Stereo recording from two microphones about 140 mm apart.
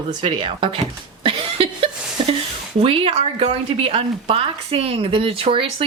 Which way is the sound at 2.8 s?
45° right (ahead or behind).